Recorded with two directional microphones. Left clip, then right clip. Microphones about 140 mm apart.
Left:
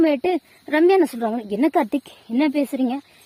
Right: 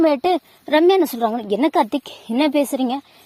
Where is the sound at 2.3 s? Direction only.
40° right (ahead or behind).